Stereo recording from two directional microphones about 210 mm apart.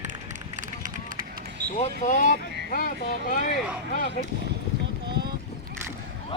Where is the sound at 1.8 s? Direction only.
35° left (ahead or behind).